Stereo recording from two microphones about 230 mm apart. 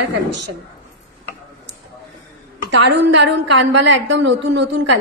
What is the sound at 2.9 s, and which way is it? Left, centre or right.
A woman's voice, right.